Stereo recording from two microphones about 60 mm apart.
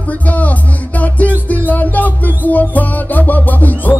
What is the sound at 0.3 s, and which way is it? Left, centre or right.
Music, left.